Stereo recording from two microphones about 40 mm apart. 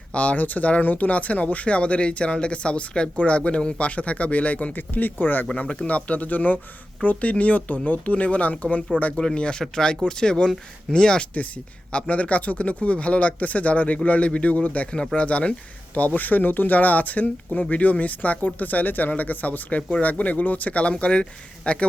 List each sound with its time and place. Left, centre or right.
0.1 s speech: left
3.8 s speech: left
5.5 s speech: left
9.2 s speech: left
11.3 s speech: left
16.0 s speech: left